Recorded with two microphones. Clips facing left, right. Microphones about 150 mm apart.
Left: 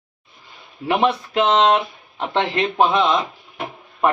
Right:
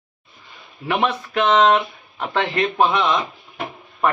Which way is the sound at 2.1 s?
30° left (ahead or behind).